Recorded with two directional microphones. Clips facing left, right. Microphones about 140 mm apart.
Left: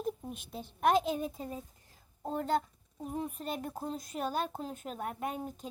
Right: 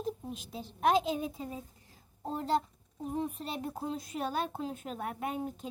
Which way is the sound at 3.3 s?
50° left (ahead or behind).